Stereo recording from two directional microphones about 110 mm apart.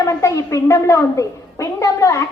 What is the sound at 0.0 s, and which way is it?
A woman's voice, 25° left (ahead or behind).